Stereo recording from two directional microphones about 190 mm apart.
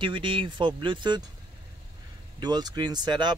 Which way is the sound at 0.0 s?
25° right (ahead or behind).